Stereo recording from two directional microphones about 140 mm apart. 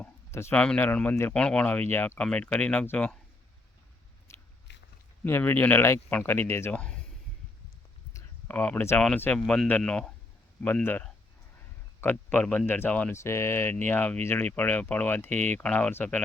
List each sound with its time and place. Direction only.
0.0 s speech: 20° left (ahead or behind)
4.3 s biting: 20° left (ahead or behind)
5.2 s speech: 15° left (ahead or behind)
8.1 s a sound: 10° left (ahead or behind)
9.0 s speech: 10° left (ahead or behind)